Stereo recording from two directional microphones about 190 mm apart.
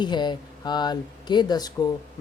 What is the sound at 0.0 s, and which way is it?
Speech, 25° left (ahead or behind).